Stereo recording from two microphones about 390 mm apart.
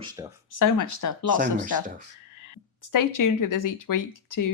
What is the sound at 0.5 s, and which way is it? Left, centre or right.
Speech, left.